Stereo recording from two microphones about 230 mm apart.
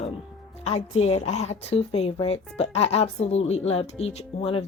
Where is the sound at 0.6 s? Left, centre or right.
Left.